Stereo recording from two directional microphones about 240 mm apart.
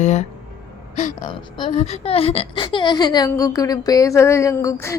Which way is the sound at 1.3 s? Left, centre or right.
Centre.